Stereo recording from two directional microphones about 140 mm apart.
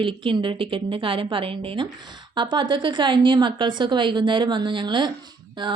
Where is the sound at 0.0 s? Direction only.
35° right (ahead or behind).